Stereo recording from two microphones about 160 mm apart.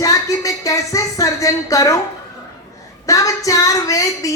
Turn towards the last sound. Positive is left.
turn(degrees=20)  # may be behind; listen again after turning